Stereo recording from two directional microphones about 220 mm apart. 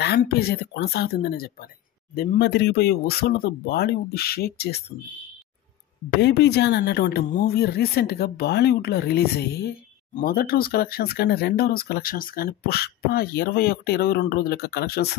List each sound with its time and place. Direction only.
0.0 s speech: 45° left (ahead or behind)
6.2 s speech: 50° left (ahead or behind)